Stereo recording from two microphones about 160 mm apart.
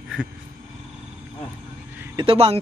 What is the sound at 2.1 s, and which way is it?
Speech, 35° right (ahead or behind).